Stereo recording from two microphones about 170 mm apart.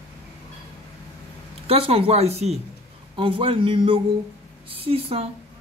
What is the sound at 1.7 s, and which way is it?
Speech, 35° right (ahead or behind).